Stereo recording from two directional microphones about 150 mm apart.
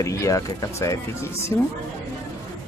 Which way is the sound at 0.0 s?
20° left (ahead or behind).